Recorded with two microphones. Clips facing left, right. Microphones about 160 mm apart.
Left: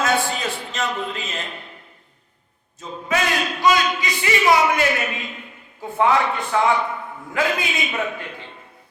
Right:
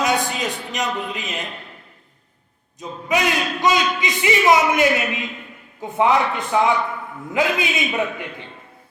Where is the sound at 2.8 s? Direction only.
15° right (ahead or behind).